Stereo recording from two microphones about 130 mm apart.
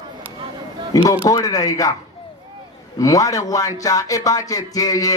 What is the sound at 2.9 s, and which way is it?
Speech, 25° left (ahead or behind).